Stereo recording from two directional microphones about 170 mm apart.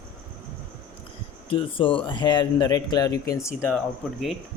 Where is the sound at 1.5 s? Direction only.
30° left (ahead or behind).